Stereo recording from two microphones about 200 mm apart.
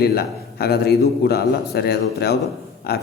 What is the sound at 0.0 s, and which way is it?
A man's voice, 50° left (ahead or behind).